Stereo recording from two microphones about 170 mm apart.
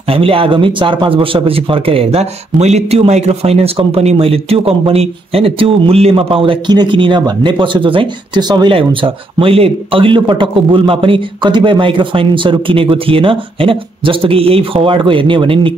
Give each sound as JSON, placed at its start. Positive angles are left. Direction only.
{"t": 0.1, "sound": "speech", "side_deg": -35}